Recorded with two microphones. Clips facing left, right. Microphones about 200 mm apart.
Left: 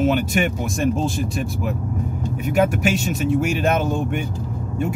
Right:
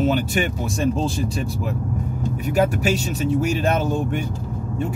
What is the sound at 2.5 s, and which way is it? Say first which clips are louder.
Speech: left 1 dB; 35° right (ahead or behind).